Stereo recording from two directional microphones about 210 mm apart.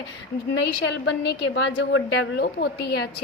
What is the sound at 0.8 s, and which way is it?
A woman's voice, 55° left (ahead or behind).